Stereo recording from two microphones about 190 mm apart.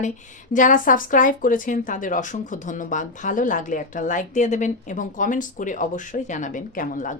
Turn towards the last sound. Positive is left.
turn(degrees=45)  # may be behind; listen again after turning